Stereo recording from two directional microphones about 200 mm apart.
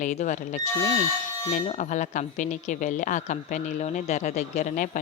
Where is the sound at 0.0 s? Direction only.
35° left (ahead or behind).